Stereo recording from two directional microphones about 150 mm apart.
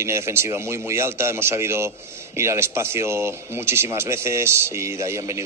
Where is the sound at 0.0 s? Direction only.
20° right (ahead or behind).